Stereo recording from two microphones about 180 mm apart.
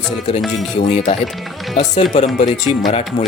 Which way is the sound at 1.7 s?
40° left (ahead or behind).